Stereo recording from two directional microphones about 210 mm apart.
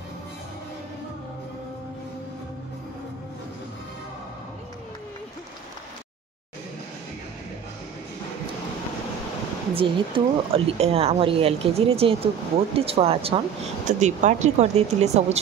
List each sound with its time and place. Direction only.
9.8 s speech: 25° right (ahead or behind)